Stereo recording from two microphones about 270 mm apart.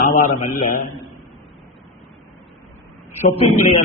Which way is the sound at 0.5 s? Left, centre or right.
Left.